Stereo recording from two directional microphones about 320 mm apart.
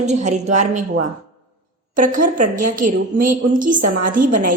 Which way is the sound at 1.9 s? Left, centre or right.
Right.